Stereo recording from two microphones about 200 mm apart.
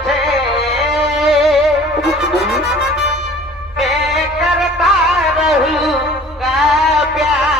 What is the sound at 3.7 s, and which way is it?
Music, centre (ahead or behind).